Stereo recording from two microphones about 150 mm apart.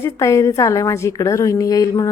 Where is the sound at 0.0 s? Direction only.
20° left (ahead or behind).